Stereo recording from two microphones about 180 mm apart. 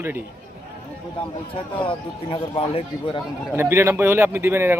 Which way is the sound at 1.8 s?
30° left (ahead or behind).